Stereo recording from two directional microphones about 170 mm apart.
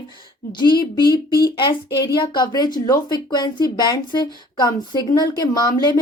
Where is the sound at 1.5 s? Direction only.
25° left (ahead or behind).